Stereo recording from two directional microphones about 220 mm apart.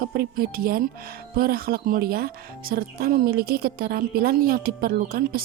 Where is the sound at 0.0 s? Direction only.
45° right (ahead or behind).